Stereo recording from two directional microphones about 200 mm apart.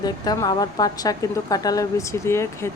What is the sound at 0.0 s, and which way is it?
Speech, 20° left (ahead or behind).